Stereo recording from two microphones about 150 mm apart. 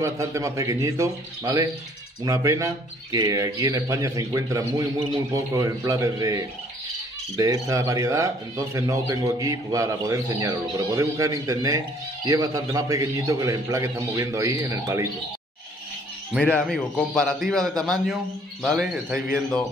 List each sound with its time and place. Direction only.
0.0 s speech: 20° right (ahead or behind)
16.3 s a man's voice: 10° left (ahead or behind)